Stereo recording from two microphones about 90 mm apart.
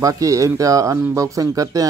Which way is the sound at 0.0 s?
40° right (ahead or behind).